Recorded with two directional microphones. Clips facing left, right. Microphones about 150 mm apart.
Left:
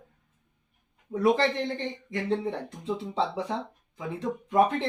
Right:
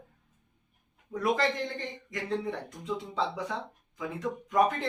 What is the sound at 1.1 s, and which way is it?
Speech, 30° left (ahead or behind).